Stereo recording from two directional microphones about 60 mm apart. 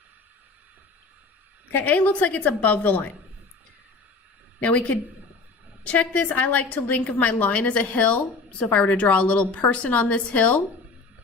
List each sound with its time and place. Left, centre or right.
1.7 s a woman's voice: left
4.6 s a woman's voice: left